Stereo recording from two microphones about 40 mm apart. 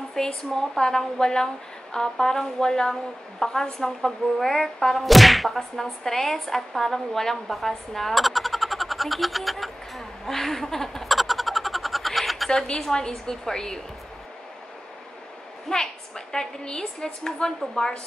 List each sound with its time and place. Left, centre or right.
0.1 s a woman's voice: centre
12.4 s a woman's voice: centre
15.7 s a woman's voice: centre